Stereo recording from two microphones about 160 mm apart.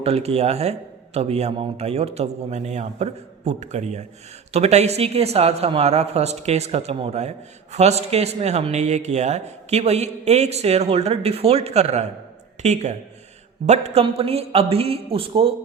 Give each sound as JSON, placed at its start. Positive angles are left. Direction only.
{"t": 0.0, "sound": "speech", "side_deg": -40}